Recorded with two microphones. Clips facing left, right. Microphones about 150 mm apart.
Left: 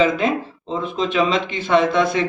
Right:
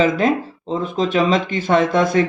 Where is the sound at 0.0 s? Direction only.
40° right (ahead or behind).